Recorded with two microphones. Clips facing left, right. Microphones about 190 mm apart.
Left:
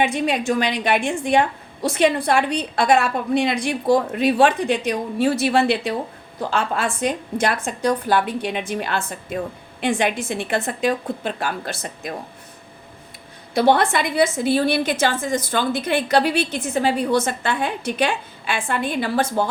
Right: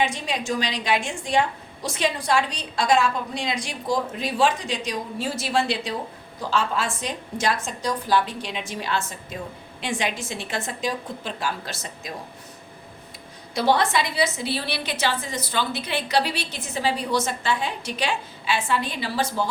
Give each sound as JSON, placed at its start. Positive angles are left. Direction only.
{"t": 0.0, "sound": "a woman's voice", "side_deg": 60}
{"t": 13.5, "sound": "a woman's voice", "side_deg": 55}